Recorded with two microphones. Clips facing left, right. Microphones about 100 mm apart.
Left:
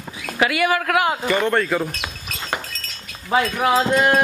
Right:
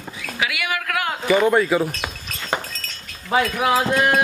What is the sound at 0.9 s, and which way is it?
Speech, 20° left (ahead or behind).